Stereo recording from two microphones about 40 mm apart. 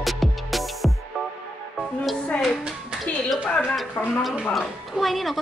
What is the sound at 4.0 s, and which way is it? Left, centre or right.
Speech, left.